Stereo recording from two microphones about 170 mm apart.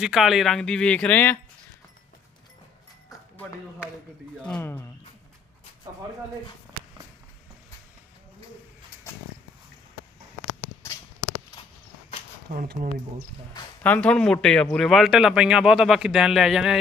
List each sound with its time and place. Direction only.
0.0 s a man's voice: centre (ahead or behind)
4.4 s speech: 10° left (ahead or behind)
5.9 s speech: 20° right (ahead or behind)
12.5 s speech: 60° right (ahead or behind)
13.8 s a man's voice: 10° left (ahead or behind)